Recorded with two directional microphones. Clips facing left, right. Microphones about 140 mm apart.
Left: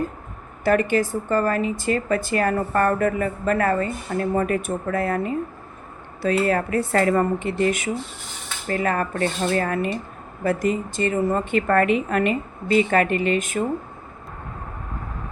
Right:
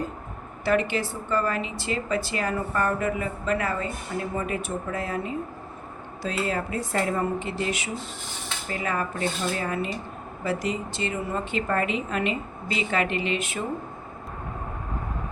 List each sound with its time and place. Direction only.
0.6 s a woman's voice: 50° left (ahead or behind)